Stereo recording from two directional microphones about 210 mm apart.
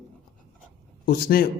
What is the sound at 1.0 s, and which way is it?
Speech, 45° left (ahead or behind).